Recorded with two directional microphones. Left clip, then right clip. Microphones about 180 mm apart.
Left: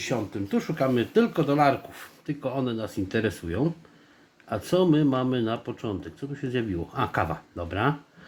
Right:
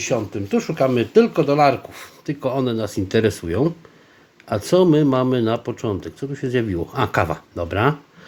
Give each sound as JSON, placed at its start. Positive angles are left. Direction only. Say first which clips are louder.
{"t": 0.0, "sound": "speech", "louder": "right 7 dB", "side_deg": -25}